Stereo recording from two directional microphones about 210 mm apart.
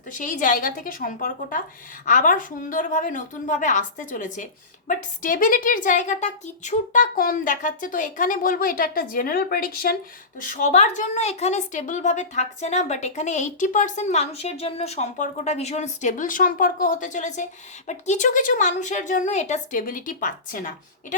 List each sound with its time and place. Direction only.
0.2 s a woman's voice: 40° left (ahead or behind)
10.5 s a woman's voice: 35° left (ahead or behind)